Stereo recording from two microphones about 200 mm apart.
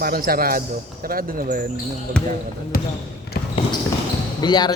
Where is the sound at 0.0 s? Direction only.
50° right (ahead or behind).